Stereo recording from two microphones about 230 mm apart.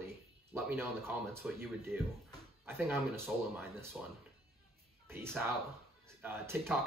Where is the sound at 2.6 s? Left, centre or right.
Centre.